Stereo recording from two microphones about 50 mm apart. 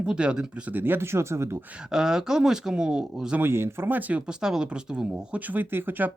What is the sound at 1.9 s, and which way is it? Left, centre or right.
Speech, centre.